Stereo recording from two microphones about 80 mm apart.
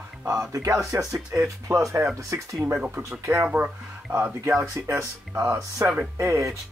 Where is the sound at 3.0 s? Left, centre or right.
Right.